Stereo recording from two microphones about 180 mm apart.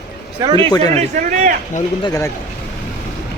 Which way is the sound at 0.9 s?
45° right (ahead or behind).